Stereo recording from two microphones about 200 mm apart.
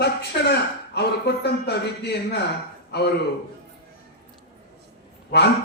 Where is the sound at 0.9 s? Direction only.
55° left (ahead or behind).